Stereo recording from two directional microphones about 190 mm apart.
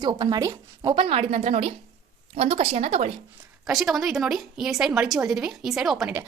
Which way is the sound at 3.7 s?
Centre (ahead or behind).